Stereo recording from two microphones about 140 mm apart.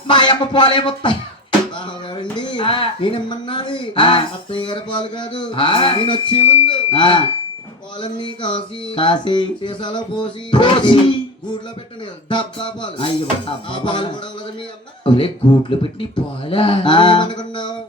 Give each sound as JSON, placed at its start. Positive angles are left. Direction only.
{"t": 0.1, "sound": "speech", "side_deg": 35}
{"t": 2.3, "sound": "speech", "side_deg": 35}
{"t": 12.3, "sound": "speech", "side_deg": 35}